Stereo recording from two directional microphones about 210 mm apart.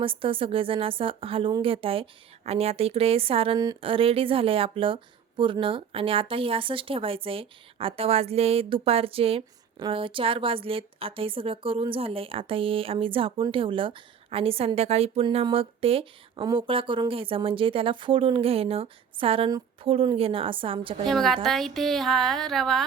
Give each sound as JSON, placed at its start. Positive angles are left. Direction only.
{"t": 0.0, "sound": "a woman's voice", "side_deg": -25}
{"t": 21.1, "sound": "speech", "side_deg": 0}